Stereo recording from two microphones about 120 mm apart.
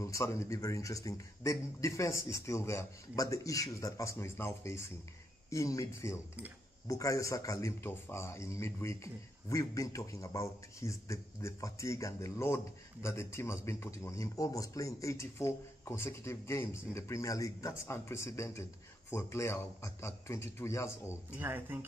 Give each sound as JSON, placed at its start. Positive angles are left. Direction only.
{"t": 0.0, "sound": "a man's voice", "side_deg": 25}
{"t": 21.4, "sound": "speech", "side_deg": -15}